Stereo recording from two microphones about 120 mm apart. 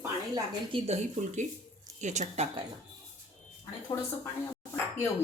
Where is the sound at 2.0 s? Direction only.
80° right.